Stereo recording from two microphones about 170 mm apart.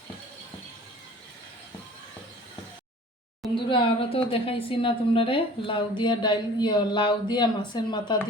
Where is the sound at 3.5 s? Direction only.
30° left (ahead or behind).